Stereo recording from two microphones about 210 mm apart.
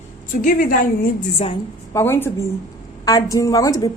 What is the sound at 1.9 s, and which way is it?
A woman's voice, 10° left (ahead or behind).